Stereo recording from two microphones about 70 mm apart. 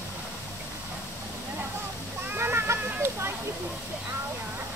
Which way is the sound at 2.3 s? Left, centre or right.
Right.